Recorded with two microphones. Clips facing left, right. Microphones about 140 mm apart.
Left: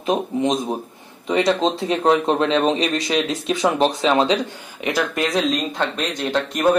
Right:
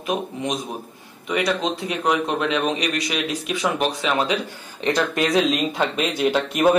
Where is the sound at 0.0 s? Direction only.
25° left (ahead or behind).